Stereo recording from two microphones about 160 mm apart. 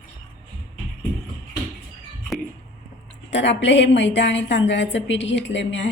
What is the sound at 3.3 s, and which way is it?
A woman's voice, 90° left.